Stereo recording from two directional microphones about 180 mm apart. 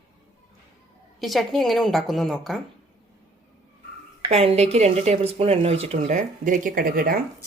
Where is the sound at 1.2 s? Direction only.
Centre (ahead or behind).